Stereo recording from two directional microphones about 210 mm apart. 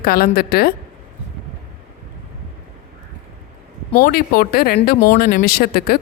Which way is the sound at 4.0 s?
45° left (ahead or behind).